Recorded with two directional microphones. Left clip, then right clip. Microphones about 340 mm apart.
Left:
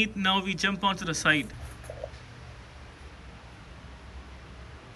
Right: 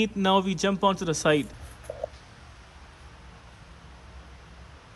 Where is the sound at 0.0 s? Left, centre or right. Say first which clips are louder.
Right 3 dB; centre.